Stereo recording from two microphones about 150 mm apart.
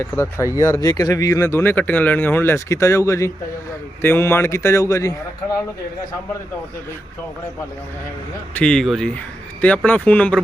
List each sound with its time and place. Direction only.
0.0 s speech: 15° left (ahead or behind)
8.5 s speech: 5° left (ahead or behind)